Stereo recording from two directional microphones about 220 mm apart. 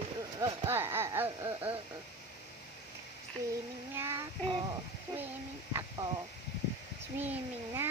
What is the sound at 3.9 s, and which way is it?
Speech, 10° right (ahead or behind).